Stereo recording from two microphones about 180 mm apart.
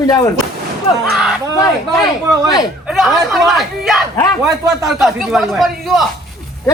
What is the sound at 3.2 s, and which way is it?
Speech, centre (ahead or behind).